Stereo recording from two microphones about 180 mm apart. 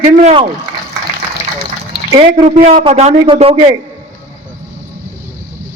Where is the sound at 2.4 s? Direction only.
40° right (ahead or behind).